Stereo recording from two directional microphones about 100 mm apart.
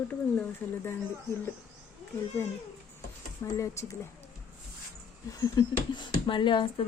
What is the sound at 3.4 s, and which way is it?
Speech, 30° left (ahead or behind).